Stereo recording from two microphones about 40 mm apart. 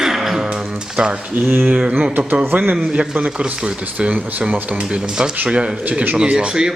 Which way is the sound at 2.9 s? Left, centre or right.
Right.